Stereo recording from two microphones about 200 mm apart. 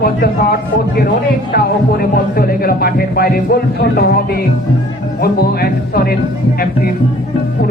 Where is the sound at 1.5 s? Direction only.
50° left (ahead or behind).